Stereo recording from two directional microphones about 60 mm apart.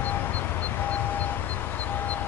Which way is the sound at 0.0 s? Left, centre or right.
Left.